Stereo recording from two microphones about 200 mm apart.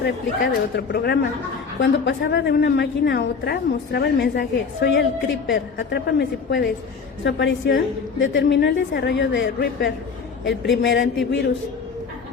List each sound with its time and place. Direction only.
0.0 s a woman's voice: 55° left (ahead or behind)